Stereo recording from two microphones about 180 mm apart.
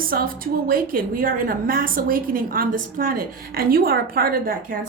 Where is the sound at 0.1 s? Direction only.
55° right (ahead or behind).